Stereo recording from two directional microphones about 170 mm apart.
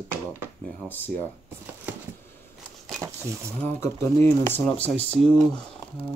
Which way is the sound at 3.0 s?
15° right (ahead or behind).